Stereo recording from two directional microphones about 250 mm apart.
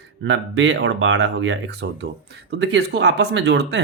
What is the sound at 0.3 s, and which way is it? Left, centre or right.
Speech, right.